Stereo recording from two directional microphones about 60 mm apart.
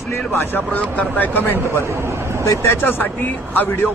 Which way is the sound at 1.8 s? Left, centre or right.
Right.